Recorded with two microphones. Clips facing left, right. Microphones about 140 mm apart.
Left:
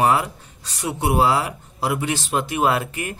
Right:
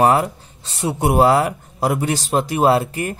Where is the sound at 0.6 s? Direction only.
25° right (ahead or behind).